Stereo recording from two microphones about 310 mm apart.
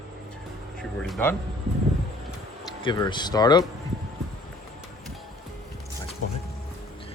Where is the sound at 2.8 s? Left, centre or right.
Centre.